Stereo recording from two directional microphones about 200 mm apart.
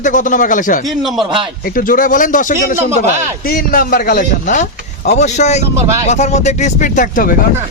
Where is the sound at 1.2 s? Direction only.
25° right (ahead or behind).